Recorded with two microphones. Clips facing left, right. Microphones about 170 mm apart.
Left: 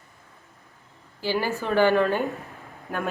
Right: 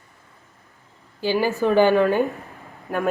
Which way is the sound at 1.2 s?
15° right (ahead or behind).